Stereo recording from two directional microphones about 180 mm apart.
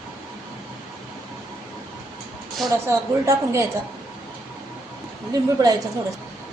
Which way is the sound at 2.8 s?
15° right (ahead or behind).